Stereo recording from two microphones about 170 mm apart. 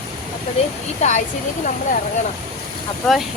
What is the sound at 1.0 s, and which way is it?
Speech, 45° left (ahead or behind).